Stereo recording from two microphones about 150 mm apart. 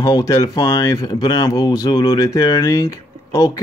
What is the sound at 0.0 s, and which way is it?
Speech, 20° left (ahead or behind).